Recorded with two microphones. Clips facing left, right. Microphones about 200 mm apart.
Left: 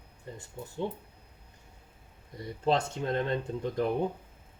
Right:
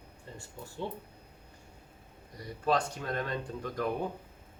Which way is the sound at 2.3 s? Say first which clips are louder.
Left 2 dB; 25° left (ahead or behind).